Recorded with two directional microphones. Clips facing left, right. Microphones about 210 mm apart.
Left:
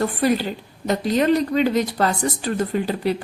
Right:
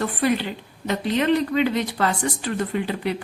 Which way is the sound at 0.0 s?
40° left (ahead or behind).